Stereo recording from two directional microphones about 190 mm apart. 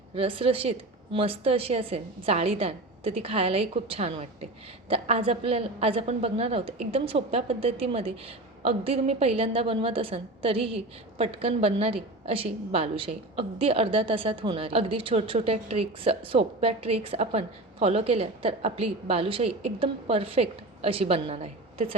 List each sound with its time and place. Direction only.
0.1 s a woman's voice: 30° right (ahead or behind)